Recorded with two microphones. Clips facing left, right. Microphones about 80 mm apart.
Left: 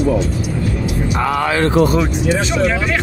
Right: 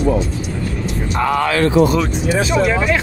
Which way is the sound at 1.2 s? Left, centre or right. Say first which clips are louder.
Right 2 dB; centre.